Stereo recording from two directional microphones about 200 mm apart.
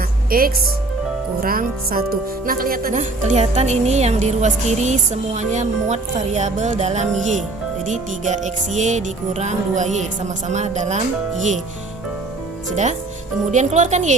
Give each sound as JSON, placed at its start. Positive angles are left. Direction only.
{"t": 0.3, "sound": "a woman's voice", "side_deg": -45}
{"t": 12.7, "sound": "speech", "side_deg": -35}